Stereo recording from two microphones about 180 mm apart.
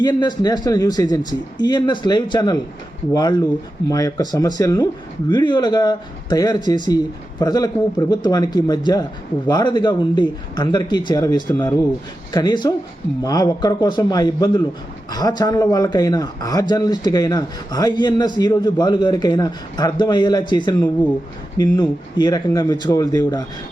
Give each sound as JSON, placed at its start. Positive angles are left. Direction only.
{"t": 0.0, "sound": "a man's voice", "side_deg": 25}